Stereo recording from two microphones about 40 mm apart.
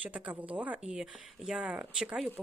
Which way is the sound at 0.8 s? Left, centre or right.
Centre.